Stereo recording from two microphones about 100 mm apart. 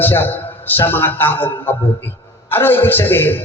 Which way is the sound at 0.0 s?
20° left (ahead or behind).